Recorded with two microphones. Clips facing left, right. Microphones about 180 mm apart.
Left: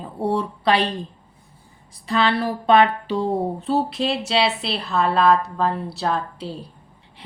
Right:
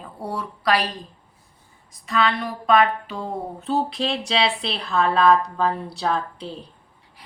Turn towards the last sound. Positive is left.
turn(degrees=5)  # may be behind; listen again after turning